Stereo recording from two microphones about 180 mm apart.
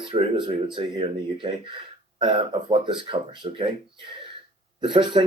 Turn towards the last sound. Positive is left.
turn(degrees=-25)  # may be behind; listen again after turning